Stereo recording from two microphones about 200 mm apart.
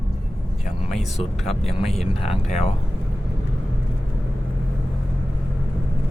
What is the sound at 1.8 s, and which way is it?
Speech, 30° left (ahead or behind).